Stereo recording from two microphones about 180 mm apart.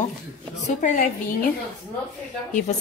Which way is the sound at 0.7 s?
45° left (ahead or behind).